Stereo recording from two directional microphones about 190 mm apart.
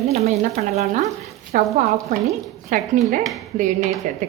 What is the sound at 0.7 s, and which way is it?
A woman's voice, 35° right (ahead or behind).